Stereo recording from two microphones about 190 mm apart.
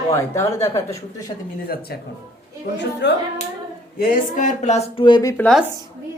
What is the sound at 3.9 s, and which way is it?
Speech, 40° left (ahead or behind).